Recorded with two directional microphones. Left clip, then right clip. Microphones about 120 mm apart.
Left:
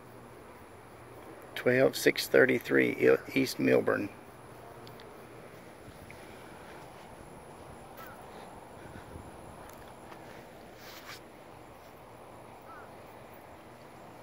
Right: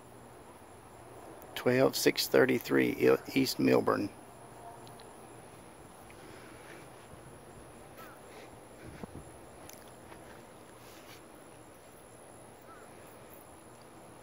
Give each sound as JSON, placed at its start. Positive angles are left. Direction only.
{"t": 1.5, "sound": "speech", "side_deg": -45}